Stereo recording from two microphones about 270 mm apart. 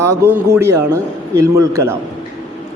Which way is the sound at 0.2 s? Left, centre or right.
Centre.